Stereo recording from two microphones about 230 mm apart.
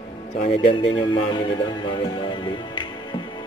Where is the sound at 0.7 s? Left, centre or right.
Left.